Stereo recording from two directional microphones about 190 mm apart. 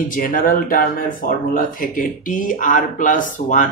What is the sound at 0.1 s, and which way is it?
A man's voice, 45° left (ahead or behind).